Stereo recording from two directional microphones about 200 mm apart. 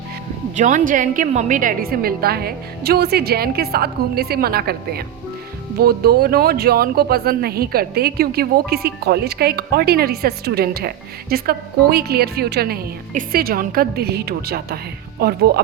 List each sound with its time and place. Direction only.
0.5 s speech: 40° right (ahead or behind)